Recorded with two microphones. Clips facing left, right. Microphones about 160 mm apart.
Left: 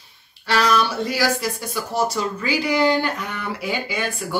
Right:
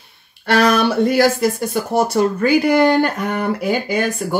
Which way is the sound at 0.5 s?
55° right (ahead or behind).